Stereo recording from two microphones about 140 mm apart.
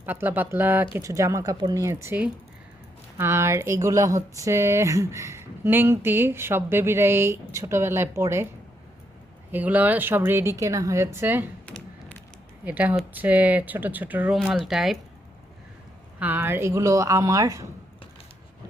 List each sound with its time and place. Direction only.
0.0 s a woman's voice: 15° right (ahead or behind)
9.5 s a woman's voice: 10° right (ahead or behind)
11.6 s tap: 10° left (ahead or behind)
12.6 s a woman's voice: 10° right (ahead or behind)
16.2 s speech: 15° right (ahead or behind)